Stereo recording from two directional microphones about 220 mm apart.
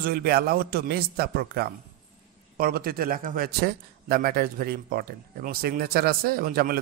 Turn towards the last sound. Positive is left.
turn(degrees=-40)  # may be behind; listen again after turning